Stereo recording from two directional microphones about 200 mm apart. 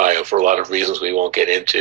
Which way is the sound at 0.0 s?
40° right (ahead or behind).